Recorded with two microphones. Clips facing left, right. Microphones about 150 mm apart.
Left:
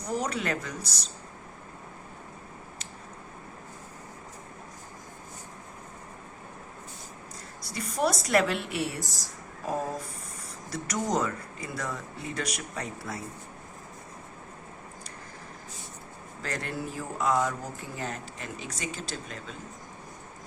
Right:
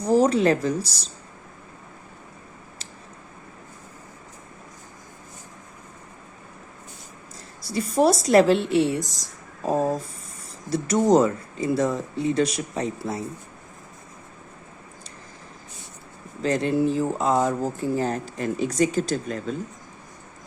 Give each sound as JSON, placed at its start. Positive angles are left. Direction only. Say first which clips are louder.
{"t": 0.0, "sound": "speech", "louder": "right 12 dB", "side_deg": -30}
{"t": 7.7, "sound": "speech", "louder": "right 8 dB", "side_deg": -30}
{"t": 16.4, "sound": "speech", "louder": "right 13 dB", "side_deg": -25}